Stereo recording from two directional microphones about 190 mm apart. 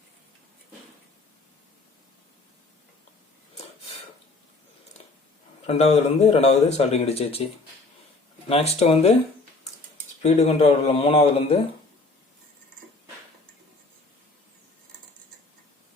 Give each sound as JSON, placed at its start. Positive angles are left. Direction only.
{"t": 5.6, "sound": "speech", "side_deg": 35}
{"t": 8.4, "sound": "speech", "side_deg": 35}
{"t": 10.2, "sound": "speech", "side_deg": 35}